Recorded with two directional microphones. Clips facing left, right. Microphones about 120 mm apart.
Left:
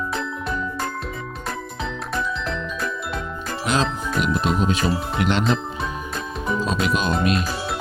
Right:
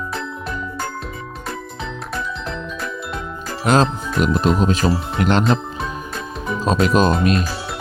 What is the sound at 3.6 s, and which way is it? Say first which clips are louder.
Speech: right 6 dB; 45° right (ahead or behind).